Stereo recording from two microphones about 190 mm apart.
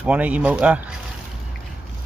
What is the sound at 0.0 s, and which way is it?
Speech, 5° right (ahead or behind).